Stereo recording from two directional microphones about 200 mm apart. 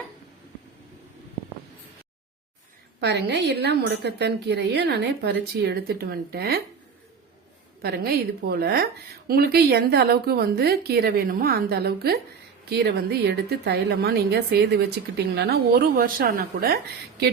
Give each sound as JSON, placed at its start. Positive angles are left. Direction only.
{"t": 3.0, "sound": "a woman's voice", "side_deg": -55}
{"t": 7.8, "sound": "a woman's voice", "side_deg": -50}